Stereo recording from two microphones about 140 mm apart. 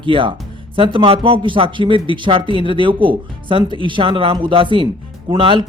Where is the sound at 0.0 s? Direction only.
40° right (ahead or behind).